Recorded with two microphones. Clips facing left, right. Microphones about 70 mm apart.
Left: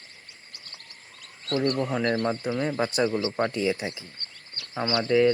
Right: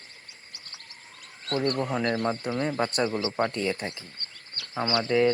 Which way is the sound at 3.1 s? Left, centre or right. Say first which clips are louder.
Left 2 dB; centre.